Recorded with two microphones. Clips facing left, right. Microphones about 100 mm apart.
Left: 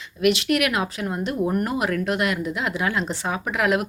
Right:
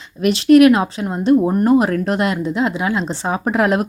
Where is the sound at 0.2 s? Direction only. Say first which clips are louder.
Right 10 dB; 35° right (ahead or behind).